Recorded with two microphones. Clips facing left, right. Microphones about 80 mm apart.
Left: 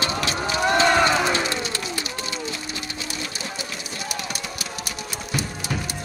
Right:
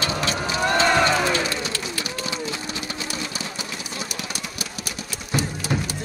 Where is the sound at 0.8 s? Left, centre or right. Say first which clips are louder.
Even; centre.